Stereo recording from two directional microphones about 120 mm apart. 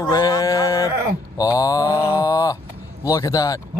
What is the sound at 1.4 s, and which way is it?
Mantra, 30° left (ahead or behind).